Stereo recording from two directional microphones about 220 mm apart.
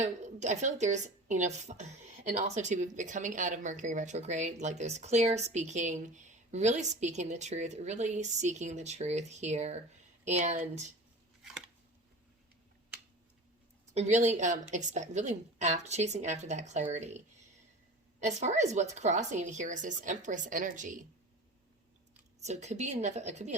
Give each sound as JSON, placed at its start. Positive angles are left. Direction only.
{"t": 0.0, "sound": "a woman's voice", "side_deg": -30}
{"t": 13.9, "sound": "a woman's voice", "side_deg": -30}
{"t": 22.4, "sound": "a woman's voice", "side_deg": -30}